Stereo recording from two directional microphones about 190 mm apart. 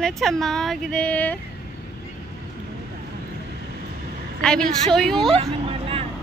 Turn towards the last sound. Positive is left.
turn(degrees=-30)  # may be behind; listen again after turning